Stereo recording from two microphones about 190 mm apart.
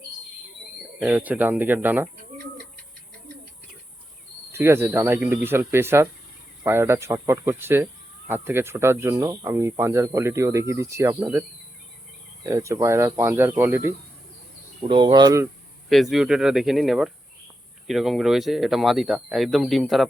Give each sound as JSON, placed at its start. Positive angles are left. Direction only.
{"t": 0.9, "sound": "speech", "side_deg": -10}
{"t": 4.5, "sound": "speech", "side_deg": -10}
{"t": 14.8, "sound": "speech", "side_deg": -25}
{"t": 15.9, "sound": "speech", "side_deg": 0}